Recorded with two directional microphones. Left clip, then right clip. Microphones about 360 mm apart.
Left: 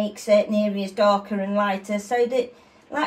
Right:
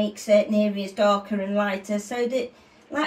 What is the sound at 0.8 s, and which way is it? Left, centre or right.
A woman's voice, centre.